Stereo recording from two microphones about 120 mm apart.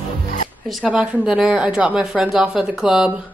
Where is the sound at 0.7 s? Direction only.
5° right (ahead or behind).